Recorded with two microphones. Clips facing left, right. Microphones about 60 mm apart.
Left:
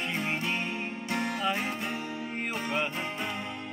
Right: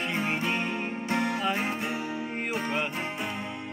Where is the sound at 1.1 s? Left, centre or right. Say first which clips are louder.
Right 4 dB; right.